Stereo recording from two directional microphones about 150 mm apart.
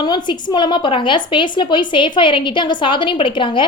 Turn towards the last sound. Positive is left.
turn(degrees=35)  # may be behind; listen again after turning